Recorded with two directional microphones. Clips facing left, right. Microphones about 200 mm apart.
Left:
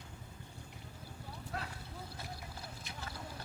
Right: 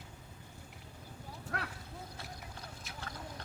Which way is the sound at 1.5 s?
70° right (ahead or behind).